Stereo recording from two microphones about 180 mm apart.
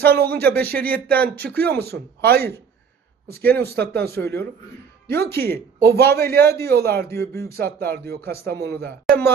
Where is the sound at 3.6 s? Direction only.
60° right (ahead or behind).